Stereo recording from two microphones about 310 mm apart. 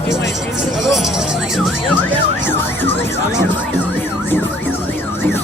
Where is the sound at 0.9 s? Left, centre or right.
Centre.